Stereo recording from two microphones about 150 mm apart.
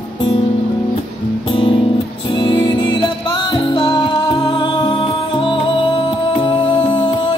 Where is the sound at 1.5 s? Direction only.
35° left (ahead or behind).